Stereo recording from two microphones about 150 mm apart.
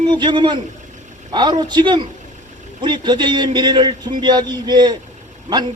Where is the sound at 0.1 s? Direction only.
30° right (ahead or behind).